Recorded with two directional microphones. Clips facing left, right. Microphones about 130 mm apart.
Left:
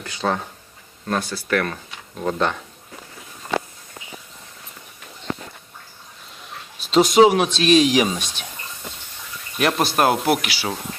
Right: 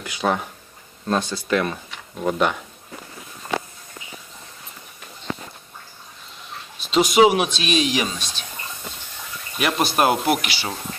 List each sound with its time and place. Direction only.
0.0 s speech: 15° right (ahead or behind)
6.9 s speech: 5° right (ahead or behind)
9.6 s speech: 5° right (ahead or behind)